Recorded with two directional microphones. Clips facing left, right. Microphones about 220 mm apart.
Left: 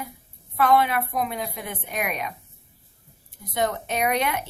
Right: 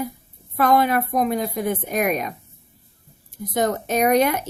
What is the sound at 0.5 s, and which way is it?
A woman's voice, 40° right (ahead or behind).